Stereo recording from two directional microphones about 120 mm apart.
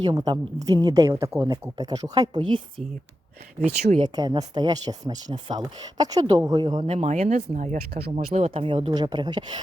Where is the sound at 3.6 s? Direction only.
65° right (ahead or behind).